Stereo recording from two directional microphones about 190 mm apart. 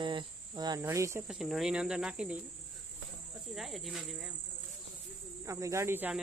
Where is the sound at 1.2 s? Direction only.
Centre (ahead or behind).